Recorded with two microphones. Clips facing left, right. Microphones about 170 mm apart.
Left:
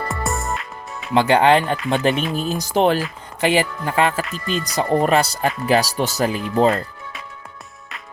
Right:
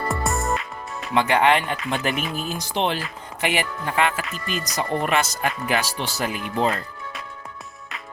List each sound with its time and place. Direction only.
0.1 s music: centre (ahead or behind)
1.1 s speech: 30° left (ahead or behind)
3.4 s speech: 30° left (ahead or behind)
7.9 s music: centre (ahead or behind)